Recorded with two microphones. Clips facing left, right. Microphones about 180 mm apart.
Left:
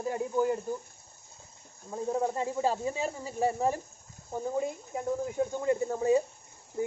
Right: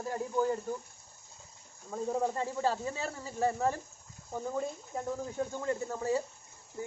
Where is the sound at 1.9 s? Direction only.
10° left (ahead or behind).